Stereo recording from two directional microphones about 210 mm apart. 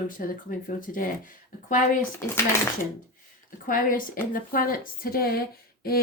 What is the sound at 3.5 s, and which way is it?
A woman's voice, 40° left (ahead or behind).